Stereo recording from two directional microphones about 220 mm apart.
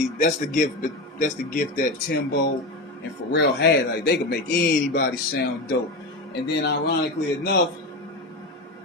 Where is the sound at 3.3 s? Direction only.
50° left (ahead or behind).